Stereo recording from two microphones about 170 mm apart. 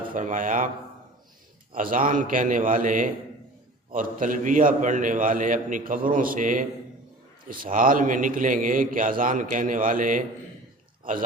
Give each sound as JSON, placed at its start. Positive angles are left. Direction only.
{"t": 0.1, "sound": "a man's voice", "side_deg": -50}
{"t": 1.7, "sound": "a man's voice", "side_deg": -55}